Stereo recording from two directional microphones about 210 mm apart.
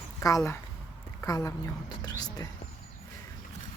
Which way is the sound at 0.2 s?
15° left (ahead or behind).